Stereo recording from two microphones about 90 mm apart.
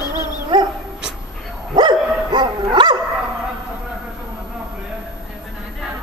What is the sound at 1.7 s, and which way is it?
Dog, 55° right (ahead or behind).